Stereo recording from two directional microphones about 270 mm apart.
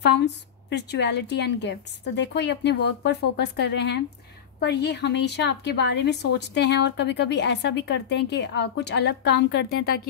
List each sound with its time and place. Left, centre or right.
0.0 s a woman's voice: left